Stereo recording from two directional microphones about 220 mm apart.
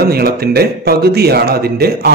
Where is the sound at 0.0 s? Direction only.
45° right (ahead or behind).